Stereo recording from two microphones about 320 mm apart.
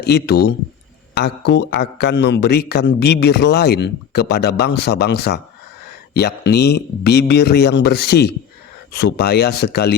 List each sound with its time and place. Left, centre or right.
0.0 s a man's voice: left